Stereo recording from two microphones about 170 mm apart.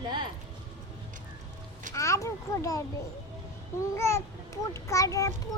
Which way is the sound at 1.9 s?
20° left (ahead or behind).